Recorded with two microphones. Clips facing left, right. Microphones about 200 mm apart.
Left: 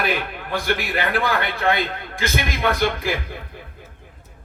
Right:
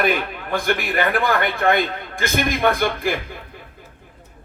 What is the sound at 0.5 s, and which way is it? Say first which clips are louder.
A man's voice: right 2 dB; 50° right (ahead or behind).